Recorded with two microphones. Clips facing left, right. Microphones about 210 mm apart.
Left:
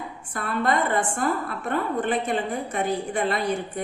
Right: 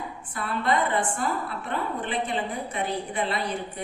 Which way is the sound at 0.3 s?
45° left (ahead or behind).